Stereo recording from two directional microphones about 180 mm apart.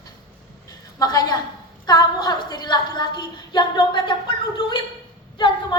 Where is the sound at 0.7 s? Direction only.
20° left (ahead or behind).